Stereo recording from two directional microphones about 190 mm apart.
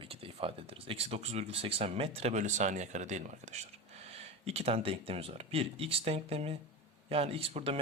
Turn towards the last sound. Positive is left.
turn(degrees=-30)  # may be behind; listen again after turning